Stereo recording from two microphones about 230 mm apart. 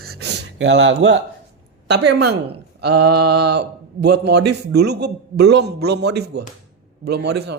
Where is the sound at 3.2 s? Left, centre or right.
Right.